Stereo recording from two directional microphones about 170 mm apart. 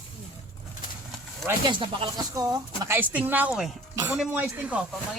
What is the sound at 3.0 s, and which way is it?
A man's voice, 10° right (ahead or behind).